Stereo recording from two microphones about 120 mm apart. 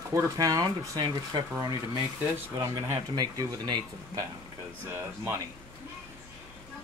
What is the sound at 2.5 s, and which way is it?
Speech, 25° right (ahead or behind).